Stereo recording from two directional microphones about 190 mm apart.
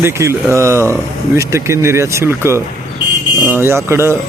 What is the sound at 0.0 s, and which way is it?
Speech, 15° right (ahead or behind).